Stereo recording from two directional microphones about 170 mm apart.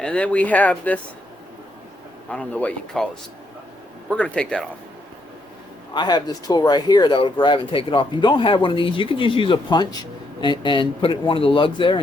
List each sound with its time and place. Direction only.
0.0 s speech: 5° left (ahead or behind)
2.3 s speech: 5° left (ahead or behind)
4.1 s speech: 5° left (ahead or behind)
5.9 s speech: 25° left (ahead or behind)